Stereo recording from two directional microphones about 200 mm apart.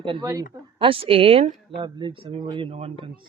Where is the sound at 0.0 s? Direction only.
25° right (ahead or behind).